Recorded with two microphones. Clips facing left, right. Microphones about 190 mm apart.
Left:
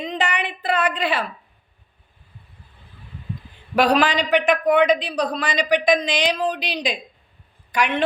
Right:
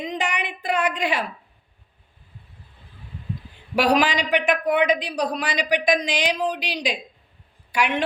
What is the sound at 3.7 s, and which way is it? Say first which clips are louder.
A woman's voice: left 2 dB; 10° right (ahead or behind).